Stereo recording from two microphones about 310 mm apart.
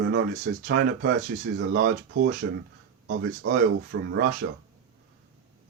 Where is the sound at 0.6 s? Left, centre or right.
Right.